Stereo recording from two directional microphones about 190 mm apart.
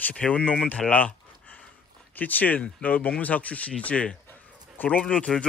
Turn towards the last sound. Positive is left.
turn(degrees=5)  # may be behind; listen again after turning